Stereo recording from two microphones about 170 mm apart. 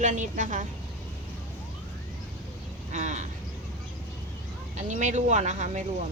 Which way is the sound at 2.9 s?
45° right (ahead or behind).